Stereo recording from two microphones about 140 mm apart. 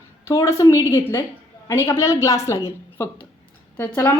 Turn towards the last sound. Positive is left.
turn(degrees=15)  # may be behind; listen again after turning